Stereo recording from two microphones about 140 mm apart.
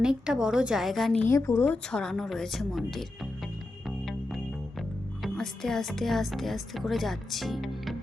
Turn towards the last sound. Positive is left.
turn(degrees=0)  # may be behind; listen again after turning